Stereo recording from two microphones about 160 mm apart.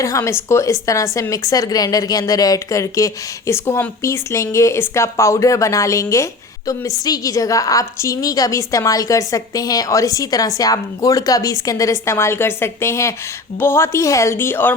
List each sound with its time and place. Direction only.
0.0 s a woman's voice: 15° left (ahead or behind)